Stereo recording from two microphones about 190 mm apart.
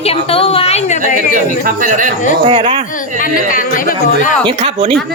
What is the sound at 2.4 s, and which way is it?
Speech, 30° right (ahead or behind).